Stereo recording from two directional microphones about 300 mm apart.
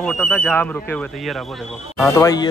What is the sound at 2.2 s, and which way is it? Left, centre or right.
Speech, centre.